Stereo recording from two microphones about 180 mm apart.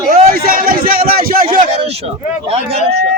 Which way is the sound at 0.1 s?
50° right (ahead or behind).